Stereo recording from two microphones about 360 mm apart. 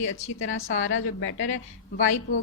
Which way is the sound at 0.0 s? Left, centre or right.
Left.